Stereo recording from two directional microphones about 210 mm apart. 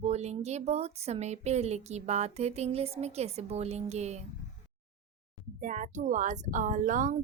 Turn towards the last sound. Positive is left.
turn(degrees=-35)  # may be behind; listen again after turning